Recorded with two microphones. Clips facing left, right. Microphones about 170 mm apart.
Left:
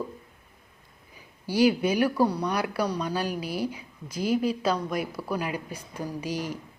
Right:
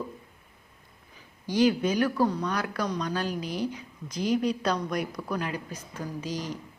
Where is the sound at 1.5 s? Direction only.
10° left (ahead or behind).